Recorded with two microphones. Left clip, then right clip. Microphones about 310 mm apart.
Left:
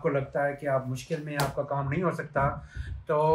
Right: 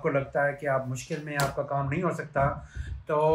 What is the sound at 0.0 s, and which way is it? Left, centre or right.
Speech, centre.